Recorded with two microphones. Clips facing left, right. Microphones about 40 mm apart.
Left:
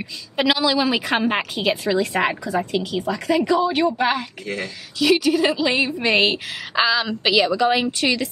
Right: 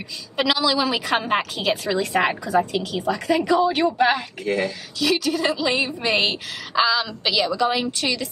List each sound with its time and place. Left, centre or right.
0.4 s a woman's voice: centre